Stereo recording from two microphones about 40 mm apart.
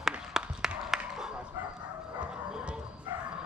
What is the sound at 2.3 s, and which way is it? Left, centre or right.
Bow-wow, centre.